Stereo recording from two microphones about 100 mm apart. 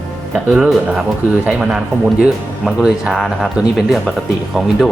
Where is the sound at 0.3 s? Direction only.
5° right (ahead or behind).